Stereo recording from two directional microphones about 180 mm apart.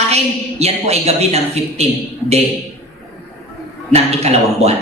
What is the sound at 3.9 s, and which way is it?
Speech, 35° right (ahead or behind).